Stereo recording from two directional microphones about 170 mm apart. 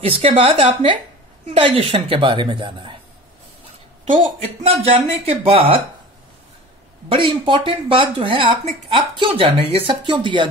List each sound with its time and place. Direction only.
0.0 s a woman's voice: 35° right (ahead or behind)
4.0 s speech: 45° right (ahead or behind)
7.1 s speech: 30° right (ahead or behind)